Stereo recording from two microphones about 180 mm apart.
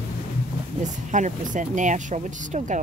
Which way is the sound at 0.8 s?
45° right (ahead or behind).